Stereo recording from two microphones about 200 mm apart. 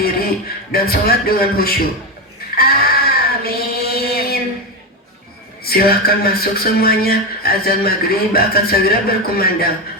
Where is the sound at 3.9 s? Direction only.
50° left (ahead or behind).